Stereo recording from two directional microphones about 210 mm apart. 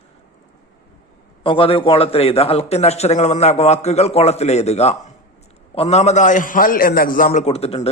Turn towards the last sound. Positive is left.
turn(degrees=30)  # may be behind; listen again after turning